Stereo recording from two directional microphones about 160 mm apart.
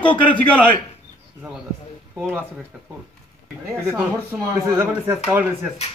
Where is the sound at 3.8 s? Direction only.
10° right (ahead or behind).